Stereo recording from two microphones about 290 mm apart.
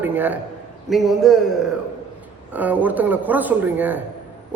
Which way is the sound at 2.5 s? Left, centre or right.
Centre.